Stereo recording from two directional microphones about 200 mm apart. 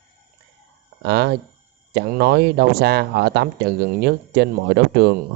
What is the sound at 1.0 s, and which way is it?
Speech, 55° right (ahead or behind).